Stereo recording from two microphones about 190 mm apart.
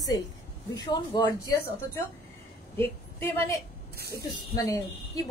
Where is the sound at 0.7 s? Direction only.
20° left (ahead or behind).